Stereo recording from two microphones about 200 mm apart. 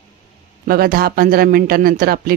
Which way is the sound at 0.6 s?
50° right (ahead or behind).